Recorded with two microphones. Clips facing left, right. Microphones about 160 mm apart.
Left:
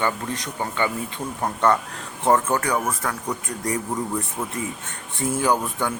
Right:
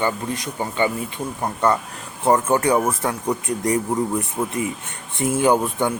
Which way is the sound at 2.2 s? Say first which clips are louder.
Right 3 dB; 20° right (ahead or behind).